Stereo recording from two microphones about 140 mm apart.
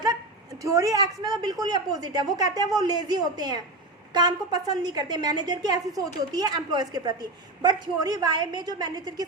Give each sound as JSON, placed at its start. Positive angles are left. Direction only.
{"t": 0.6, "sound": "a woman's voice", "side_deg": -25}